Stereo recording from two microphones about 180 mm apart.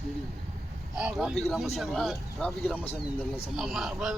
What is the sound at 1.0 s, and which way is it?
A man's voice, 5° right (ahead or behind).